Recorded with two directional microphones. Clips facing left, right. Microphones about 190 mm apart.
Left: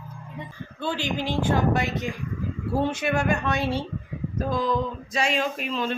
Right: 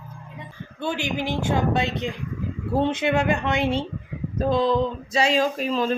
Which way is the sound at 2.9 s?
20° right (ahead or behind).